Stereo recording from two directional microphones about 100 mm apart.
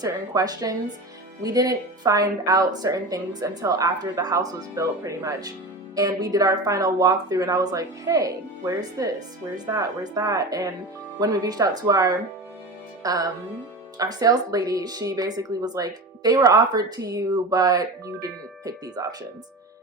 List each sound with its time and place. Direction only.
0.0 s a woman's voice: 40° right (ahead or behind)